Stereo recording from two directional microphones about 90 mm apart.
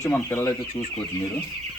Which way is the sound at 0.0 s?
30° left (ahead or behind).